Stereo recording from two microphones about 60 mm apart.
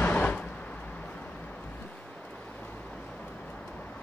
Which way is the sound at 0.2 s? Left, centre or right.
Left.